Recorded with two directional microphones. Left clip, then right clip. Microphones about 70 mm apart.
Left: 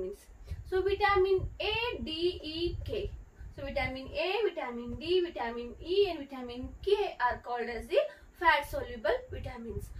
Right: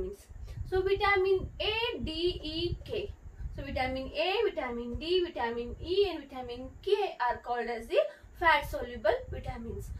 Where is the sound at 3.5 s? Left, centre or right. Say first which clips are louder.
Right 1 dB; left.